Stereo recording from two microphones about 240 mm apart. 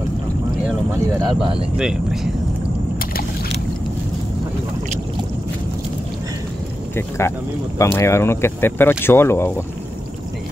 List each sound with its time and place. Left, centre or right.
1.2 s speech: right
1.8 s speech: centre
7.0 s speech: centre